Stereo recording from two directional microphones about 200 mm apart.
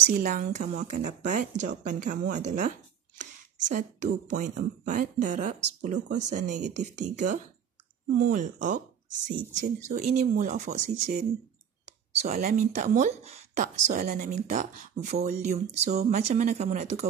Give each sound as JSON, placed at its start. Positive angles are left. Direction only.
{"t": 0.0, "sound": "a woman's voice", "side_deg": -40}